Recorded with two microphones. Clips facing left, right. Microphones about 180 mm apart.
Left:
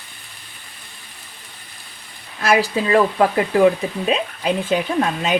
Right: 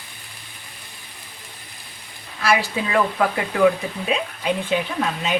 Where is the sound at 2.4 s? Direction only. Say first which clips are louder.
Left 3 dB; 45° left (ahead or behind).